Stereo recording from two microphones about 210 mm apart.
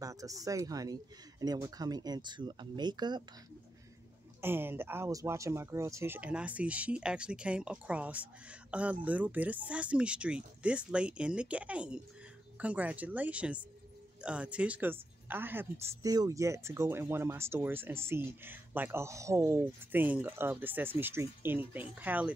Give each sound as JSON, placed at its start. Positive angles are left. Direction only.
{"t": 0.0, "sound": "speech", "side_deg": -15}
{"t": 4.4, "sound": "speech", "side_deg": -10}